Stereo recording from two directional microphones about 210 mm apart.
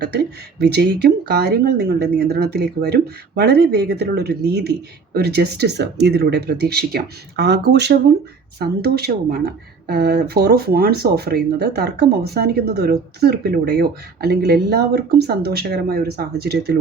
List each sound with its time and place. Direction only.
0.6 s speech: 50° right (ahead or behind)